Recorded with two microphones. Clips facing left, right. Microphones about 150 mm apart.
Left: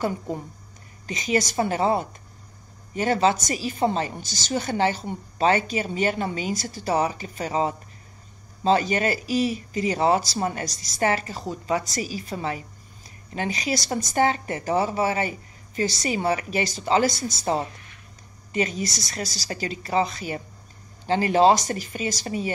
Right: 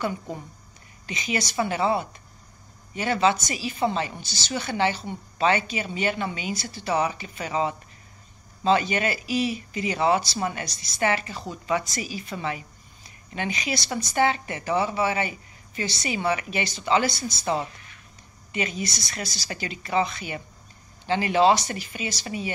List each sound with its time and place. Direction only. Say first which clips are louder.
0.0 s speech: left 3 dB; 35° left (ahead or behind)